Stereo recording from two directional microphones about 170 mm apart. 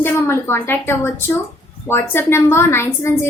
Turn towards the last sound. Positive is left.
turn(degrees=15)  # may be behind; listen again after turning